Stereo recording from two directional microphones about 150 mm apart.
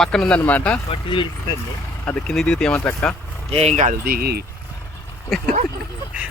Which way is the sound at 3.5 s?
45° right (ahead or behind).